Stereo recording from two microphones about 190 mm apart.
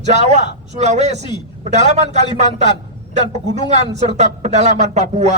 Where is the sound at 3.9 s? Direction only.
35° right (ahead or behind).